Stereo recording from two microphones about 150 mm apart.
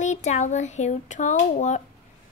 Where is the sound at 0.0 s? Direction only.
50° left (ahead or behind).